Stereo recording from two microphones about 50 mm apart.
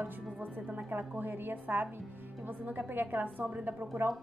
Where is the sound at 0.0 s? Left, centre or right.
Right.